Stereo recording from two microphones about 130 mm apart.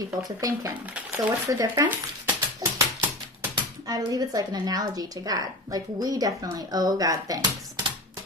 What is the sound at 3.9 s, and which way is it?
Speech, 30° right (ahead or behind).